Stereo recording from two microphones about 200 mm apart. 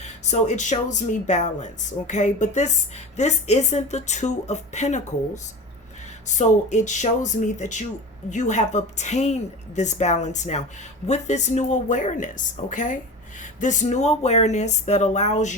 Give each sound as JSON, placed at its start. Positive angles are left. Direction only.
{"t": 0.0, "sound": "speech", "side_deg": 35}